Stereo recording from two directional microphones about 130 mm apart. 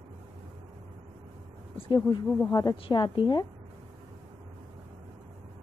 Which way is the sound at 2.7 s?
40° left (ahead or behind).